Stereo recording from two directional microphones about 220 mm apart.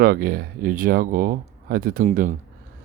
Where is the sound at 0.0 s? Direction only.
40° right (ahead or behind).